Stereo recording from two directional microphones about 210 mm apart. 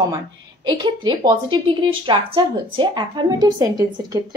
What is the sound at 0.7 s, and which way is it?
A woman's voice, 20° right (ahead or behind).